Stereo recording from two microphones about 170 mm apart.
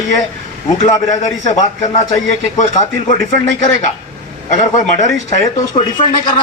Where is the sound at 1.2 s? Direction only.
45° left (ahead or behind).